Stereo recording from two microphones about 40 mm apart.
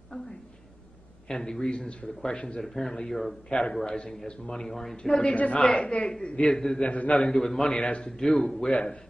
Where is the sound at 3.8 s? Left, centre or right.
Left.